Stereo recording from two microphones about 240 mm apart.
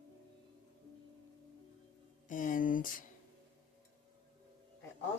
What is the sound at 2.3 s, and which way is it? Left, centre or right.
Speech, left.